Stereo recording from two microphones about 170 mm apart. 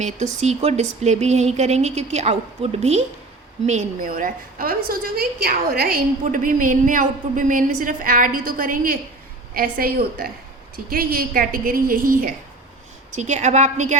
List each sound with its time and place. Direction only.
0.0 s a woman's voice: 40° right (ahead or behind)
4.1 s a woman's voice: 55° right (ahead or behind)
13.1 s a woman's voice: 45° right (ahead or behind)